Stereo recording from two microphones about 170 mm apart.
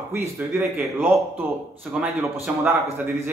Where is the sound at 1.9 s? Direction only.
Centre (ahead or behind).